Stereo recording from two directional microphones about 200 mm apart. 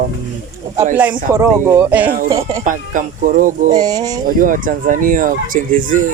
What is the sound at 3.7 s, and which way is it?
Speech, 20° right (ahead or behind).